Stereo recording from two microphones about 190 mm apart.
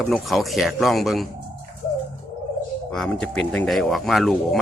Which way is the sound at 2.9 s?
5° left (ahead or behind).